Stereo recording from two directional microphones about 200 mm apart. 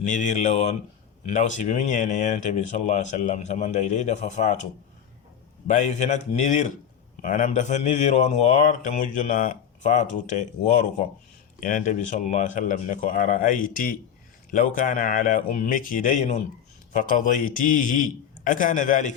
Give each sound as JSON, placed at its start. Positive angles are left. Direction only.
{"t": 0.0, "sound": "speech", "side_deg": 40}
{"t": 5.6, "sound": "speech", "side_deg": 35}